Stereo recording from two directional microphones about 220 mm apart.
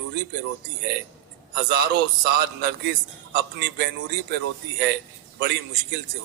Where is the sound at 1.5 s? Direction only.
45° right (ahead or behind).